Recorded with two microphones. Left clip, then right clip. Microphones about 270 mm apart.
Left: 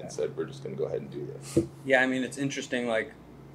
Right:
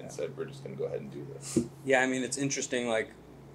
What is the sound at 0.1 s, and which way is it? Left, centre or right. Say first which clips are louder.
Speech: left 5 dB; left.